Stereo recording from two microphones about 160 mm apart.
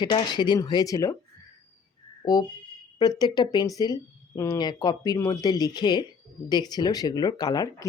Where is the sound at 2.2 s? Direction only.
25° left (ahead or behind).